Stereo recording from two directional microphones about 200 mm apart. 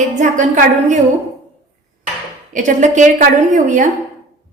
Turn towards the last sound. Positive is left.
turn(degrees=-40)  # may be behind; listen again after turning